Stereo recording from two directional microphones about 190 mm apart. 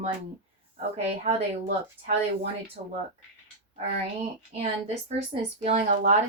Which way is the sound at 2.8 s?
45° right (ahead or behind).